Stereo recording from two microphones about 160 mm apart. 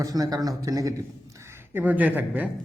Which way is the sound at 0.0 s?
25° right (ahead or behind).